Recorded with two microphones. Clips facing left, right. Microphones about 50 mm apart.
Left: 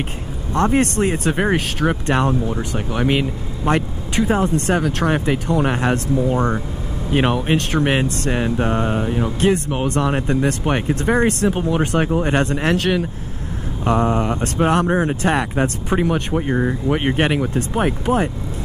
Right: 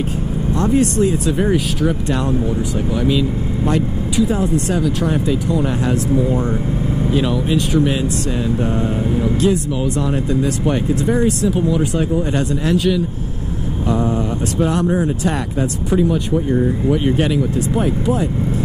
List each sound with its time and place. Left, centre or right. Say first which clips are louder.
0.6 s speech: right 1 dB; left